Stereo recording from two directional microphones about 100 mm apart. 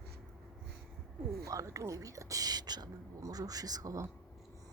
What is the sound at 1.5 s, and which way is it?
Speech, 30° right (ahead or behind).